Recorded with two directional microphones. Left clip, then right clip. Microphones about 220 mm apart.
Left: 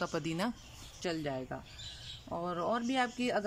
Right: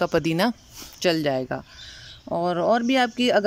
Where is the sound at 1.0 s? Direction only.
45° right (ahead or behind).